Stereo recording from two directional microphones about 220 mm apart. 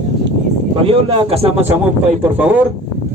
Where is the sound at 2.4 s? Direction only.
10° right (ahead or behind).